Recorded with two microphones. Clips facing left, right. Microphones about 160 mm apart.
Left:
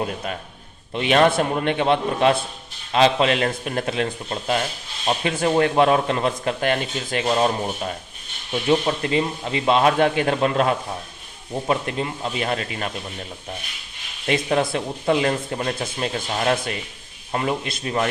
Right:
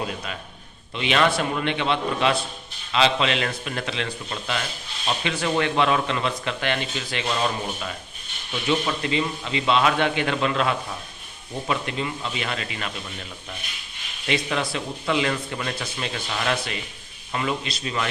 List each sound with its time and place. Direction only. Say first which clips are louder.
0.0 s speech: left 4 dB; 45° left (ahead or behind)